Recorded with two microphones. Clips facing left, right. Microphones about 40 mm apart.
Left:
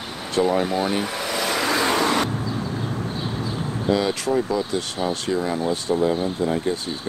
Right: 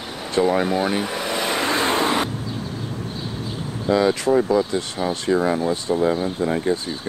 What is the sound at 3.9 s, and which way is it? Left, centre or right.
Speech, right.